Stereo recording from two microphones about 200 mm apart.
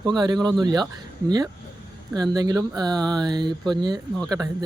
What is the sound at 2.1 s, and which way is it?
Speech, 20° right (ahead or behind).